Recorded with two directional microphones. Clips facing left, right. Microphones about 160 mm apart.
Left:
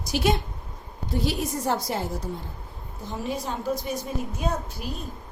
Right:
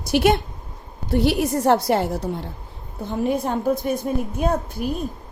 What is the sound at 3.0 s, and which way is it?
A woman's voice, 60° right (ahead or behind).